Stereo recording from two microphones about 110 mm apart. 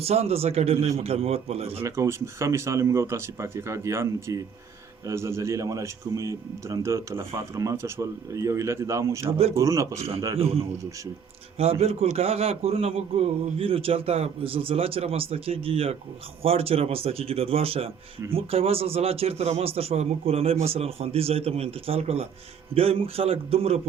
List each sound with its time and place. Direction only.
0.0 s a man's voice: 65° right (ahead or behind)
1.8 s speech: 25° right (ahead or behind)
10.3 s a man's voice: 60° right (ahead or behind)